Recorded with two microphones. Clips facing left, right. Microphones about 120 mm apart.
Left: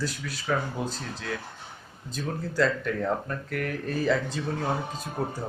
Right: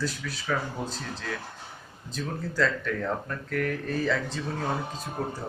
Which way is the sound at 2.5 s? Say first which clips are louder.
Left 2 dB; 10° left (ahead or behind).